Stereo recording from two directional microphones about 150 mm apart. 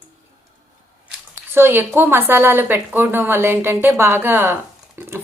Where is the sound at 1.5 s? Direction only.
15° right (ahead or behind).